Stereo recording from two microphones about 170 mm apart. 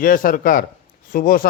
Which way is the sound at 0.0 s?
55° left (ahead or behind).